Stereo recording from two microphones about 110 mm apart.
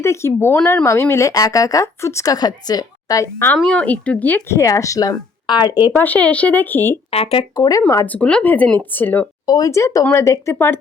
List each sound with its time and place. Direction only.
0.0 s speech: 25° left (ahead or behind)
3.6 s speech: 10° left (ahead or behind); by 5.9 s 35° left (ahead or behind)
5.9 s speech: 15° left (ahead or behind)
7.1 s speech: 60° left (ahead or behind)
7.5 s speech: 40° left (ahead or behind)
8.0 s speech: 15° left (ahead or behind)
9.5 s speech: 30° left (ahead or behind)